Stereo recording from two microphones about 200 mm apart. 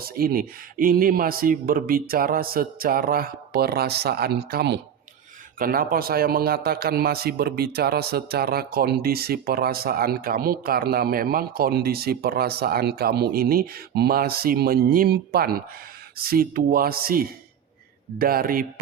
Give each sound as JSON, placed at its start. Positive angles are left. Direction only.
{"t": 0.0, "sound": "a man's voice", "side_deg": -50}
{"t": 5.5, "sound": "a man's voice", "side_deg": -45}